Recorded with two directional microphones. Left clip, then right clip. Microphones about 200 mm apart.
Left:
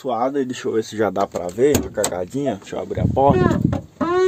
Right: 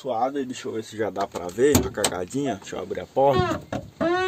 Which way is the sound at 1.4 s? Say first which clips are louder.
Left 1 dB; 5° left (ahead or behind).